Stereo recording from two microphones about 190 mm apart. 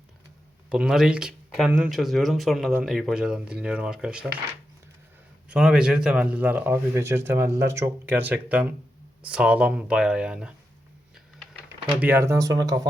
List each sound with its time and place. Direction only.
0.7 s speech: 5° right (ahead or behind)
5.5 s a man's voice: 5° right (ahead or behind)
11.9 s a man's voice: 10° right (ahead or behind)